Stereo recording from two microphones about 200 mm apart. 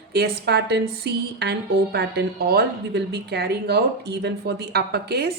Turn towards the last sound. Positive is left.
turn(degrees=-55)  # may be behind; listen again after turning